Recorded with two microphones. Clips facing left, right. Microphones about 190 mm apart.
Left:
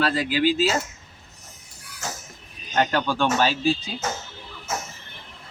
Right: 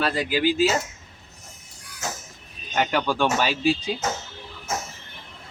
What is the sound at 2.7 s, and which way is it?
Speech, 10° right (ahead or behind).